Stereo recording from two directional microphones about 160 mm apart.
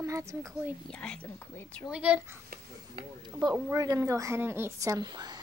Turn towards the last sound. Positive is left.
turn(degrees=-25)  # may be behind; listen again after turning